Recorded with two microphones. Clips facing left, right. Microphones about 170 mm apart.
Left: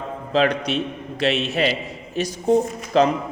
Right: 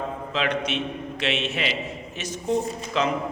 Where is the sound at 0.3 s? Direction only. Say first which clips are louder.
Left 7 dB; 35° left (ahead or behind).